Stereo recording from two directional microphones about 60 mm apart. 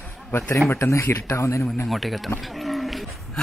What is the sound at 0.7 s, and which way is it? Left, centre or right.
Speech, left.